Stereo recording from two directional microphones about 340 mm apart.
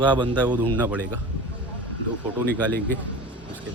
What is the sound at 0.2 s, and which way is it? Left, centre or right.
Speech, centre.